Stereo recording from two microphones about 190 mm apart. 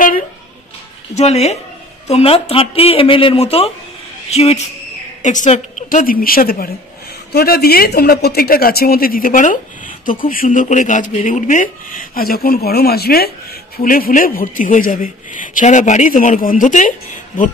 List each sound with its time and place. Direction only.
1.1 s a man's voice: 35° left (ahead or behind)